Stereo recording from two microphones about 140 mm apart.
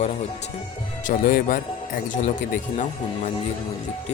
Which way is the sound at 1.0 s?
85° left.